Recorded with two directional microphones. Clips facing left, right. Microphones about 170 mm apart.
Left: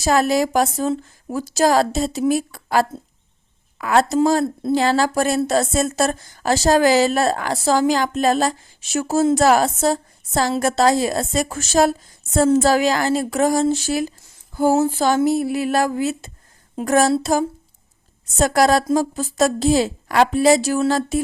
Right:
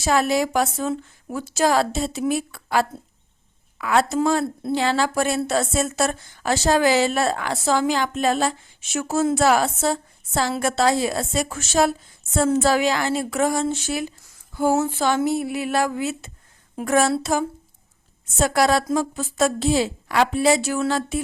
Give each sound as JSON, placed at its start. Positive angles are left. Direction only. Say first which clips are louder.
{"t": 0.0, "sound": "a woman's voice", "louder": "left 3 dB", "side_deg": 40}
{"t": 14.5, "sound": "a sound", "louder": "left 3 dB", "side_deg": 35}
{"t": 14.8, "sound": "a woman's voice", "louder": "left 4 dB", "side_deg": 40}